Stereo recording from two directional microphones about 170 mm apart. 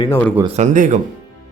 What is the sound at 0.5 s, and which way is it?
Speech, 45° right (ahead or behind).